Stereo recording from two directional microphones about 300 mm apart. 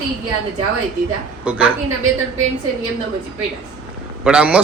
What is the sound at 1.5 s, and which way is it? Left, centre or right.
Speech, centre.